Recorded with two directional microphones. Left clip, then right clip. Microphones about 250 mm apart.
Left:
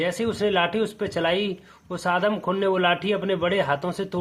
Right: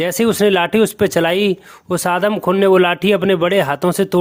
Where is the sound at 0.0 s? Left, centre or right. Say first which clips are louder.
Right 9 dB; right.